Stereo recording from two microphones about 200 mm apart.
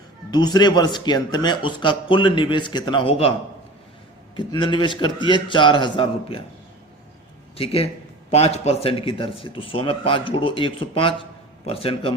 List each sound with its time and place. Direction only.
0.3 s speech: 20° left (ahead or behind)
4.4 s speech: 25° left (ahead or behind)
7.5 s speech: 30° left (ahead or behind)